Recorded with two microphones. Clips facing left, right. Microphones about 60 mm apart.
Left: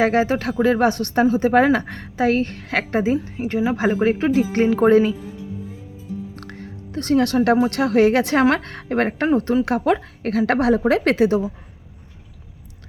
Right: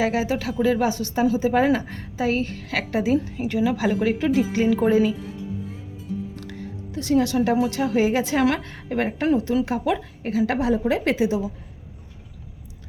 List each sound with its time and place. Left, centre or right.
0.0 s a woman's voice: left
3.4 s a woman's voice: left
4.5 s a woman's voice: left
6.3 s a sound: left
7.7 s a woman's voice: left